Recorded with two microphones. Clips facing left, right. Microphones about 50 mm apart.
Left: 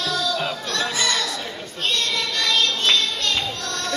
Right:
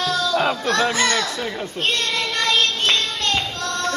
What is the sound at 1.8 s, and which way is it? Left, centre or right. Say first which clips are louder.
Child singing: right 1 dB; right.